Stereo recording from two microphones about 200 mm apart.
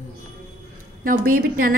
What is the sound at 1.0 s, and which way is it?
Speech, 45° right (ahead or behind).